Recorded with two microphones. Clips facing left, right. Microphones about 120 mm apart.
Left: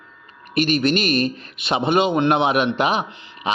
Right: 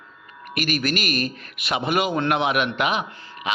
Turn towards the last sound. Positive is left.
turn(degrees=35)  # may be behind; listen again after turning